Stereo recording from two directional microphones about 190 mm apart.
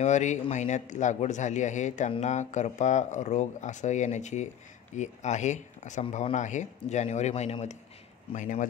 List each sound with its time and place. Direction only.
0.0 s speech: 40° left (ahead or behind)